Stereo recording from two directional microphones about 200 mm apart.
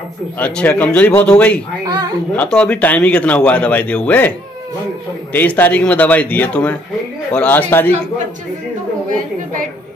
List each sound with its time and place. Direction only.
0.4 s a man's voice: 5° left (ahead or behind)
5.3 s a man's voice: 10° left (ahead or behind)
9.1 s a woman's voice: 40° right (ahead or behind)